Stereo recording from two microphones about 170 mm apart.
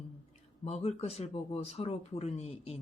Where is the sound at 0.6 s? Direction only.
40° left (ahead or behind).